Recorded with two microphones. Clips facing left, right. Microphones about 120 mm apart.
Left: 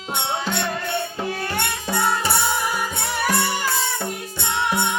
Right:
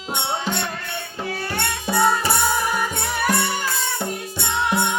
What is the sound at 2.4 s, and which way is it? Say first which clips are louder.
Music: right 2 dB; centre (ahead or behind).